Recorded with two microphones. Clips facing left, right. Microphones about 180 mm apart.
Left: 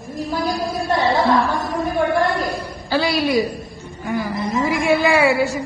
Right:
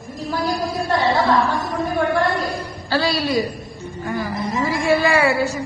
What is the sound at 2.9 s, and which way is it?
Speech, 20° left (ahead or behind).